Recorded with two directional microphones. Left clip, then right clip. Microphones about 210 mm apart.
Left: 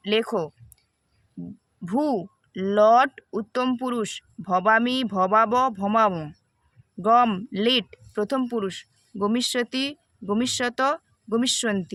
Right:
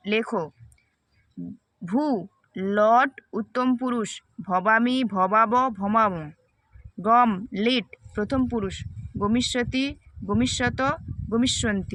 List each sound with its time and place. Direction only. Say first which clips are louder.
0.0 s speech: left 2 dB; 20° left (ahead or behind)
1.8 s speech: left 1 dB; 25° left (ahead or behind)